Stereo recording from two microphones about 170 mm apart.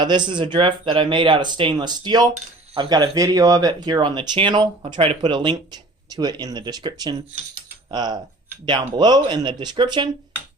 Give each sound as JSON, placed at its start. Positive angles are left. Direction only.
{"t": 0.0, "sound": "speech", "side_deg": -25}